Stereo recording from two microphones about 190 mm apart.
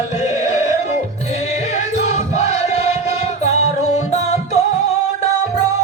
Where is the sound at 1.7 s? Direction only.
35° left (ahead or behind).